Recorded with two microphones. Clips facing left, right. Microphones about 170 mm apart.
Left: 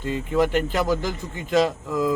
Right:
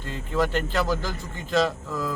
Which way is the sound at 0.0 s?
15° left (ahead or behind).